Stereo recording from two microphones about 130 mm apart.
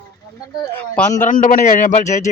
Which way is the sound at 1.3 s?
90° left.